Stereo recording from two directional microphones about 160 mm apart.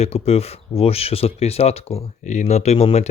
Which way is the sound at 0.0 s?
40° left (ahead or behind).